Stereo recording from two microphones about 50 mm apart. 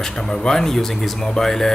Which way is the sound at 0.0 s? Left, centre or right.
Centre.